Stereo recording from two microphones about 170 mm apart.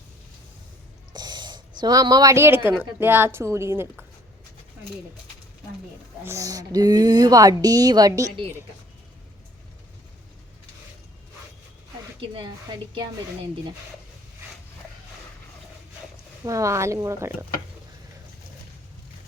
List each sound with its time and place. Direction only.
1.1 s a sound: 25° right (ahead or behind)
2.6 s a woman's voice: 15° right (ahead or behind)
6.2 s speech: 20° right (ahead or behind)
16.5 s a woman's voice: 20° right (ahead or behind)